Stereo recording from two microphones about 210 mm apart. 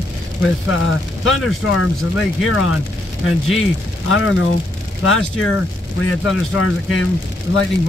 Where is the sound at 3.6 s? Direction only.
75° left (ahead or behind).